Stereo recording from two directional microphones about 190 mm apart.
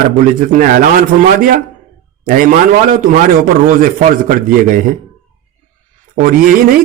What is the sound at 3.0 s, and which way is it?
Speech, 45° right (ahead or behind).